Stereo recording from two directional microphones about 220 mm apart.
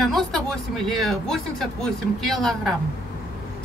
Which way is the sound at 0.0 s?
Centre (ahead or behind).